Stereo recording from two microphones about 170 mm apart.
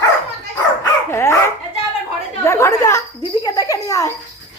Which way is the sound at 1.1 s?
15° left (ahead or behind).